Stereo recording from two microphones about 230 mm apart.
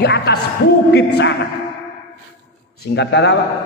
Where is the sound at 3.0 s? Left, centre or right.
Left.